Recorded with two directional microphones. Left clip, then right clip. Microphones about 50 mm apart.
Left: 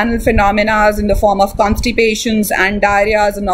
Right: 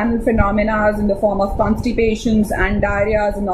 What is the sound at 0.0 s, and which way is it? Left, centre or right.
Speech, left.